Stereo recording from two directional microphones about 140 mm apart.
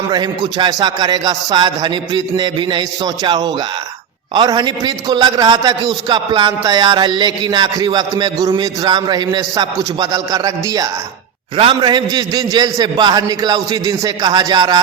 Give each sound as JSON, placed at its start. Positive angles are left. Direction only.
{"t": 0.1, "sound": "a man's voice", "side_deg": -30}
{"t": 11.5, "sound": "a man's voice", "side_deg": -35}